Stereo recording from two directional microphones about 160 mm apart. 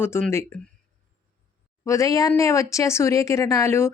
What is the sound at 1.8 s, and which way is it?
Speech, 20° left (ahead or behind).